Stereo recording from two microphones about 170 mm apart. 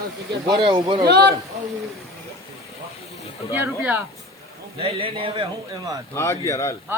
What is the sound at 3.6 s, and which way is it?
Speech, 10° right (ahead or behind).